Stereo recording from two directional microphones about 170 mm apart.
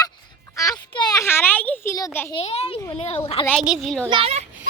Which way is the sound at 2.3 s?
35° left (ahead or behind).